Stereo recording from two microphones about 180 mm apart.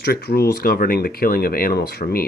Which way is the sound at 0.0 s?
65° left (ahead or behind).